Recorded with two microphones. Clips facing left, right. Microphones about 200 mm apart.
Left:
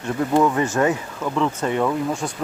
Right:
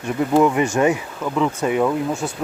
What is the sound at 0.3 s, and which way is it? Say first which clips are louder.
Speech: right 2 dB; 15° right (ahead or behind).